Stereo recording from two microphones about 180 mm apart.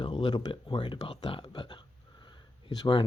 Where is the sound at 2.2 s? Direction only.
25° left (ahead or behind).